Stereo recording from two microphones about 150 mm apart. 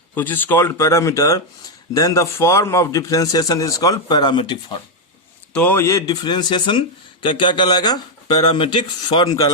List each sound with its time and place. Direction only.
0.1 s a man's voice: 10° left (ahead or behind); by 4.8 s 30° left (ahead or behind)
5.5 s speech: 15° left (ahead or behind); by 9.3 s 30° left (ahead or behind)